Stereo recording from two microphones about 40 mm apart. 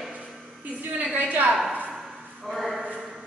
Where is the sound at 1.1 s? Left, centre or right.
Right.